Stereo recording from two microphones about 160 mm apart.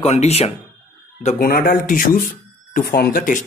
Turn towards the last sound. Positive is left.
turn(degrees=60)  # may be behind; listen again after turning